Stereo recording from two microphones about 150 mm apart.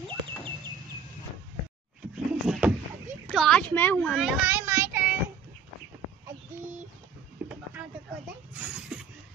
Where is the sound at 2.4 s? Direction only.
5° right (ahead or behind).